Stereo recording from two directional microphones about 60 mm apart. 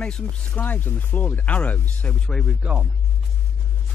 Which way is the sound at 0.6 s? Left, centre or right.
Left.